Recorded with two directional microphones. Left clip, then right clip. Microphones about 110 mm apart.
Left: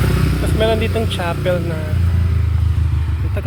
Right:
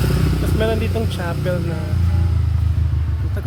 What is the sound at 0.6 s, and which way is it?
Speech, 25° right (ahead or behind).